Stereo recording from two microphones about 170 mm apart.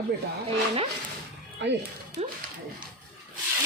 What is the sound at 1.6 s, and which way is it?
Speech, 90° right.